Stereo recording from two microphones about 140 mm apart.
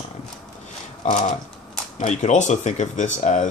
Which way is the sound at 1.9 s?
60° left (ahead or behind).